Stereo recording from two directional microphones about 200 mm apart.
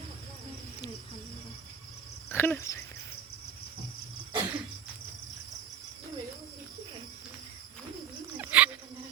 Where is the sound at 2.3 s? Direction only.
10° left (ahead or behind).